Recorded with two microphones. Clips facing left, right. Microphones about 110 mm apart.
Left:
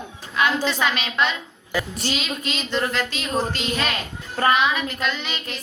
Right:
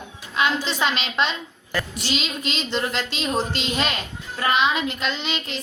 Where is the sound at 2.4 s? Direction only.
25° right (ahead or behind).